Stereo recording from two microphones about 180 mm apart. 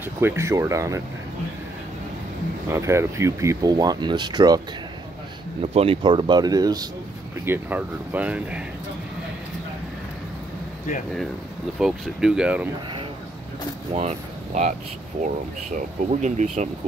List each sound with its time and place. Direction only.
0.2 s speech: 15° right (ahead or behind)
2.7 s speech: 15° right (ahead or behind)
5.6 s speech: 35° right (ahead or behind)
7.4 s speech: 10° right (ahead or behind)
11.8 s speech: 5° right (ahead or behind)
13.9 s speech: 40° right (ahead or behind)